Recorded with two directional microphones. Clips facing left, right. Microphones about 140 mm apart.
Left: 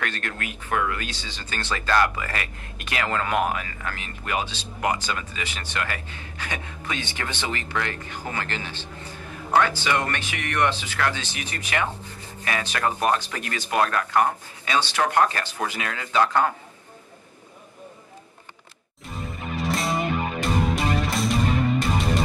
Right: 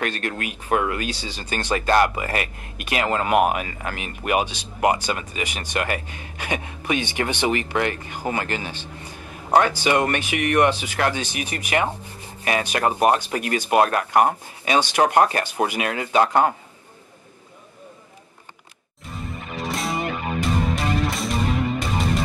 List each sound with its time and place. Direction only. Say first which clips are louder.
0.0 s speech: right 4 dB; 20° right (ahead or behind)
1.0 s speech: right 6 dB; 15° right (ahead or behind)
19.5 s music: left 1 dB; centre (ahead or behind)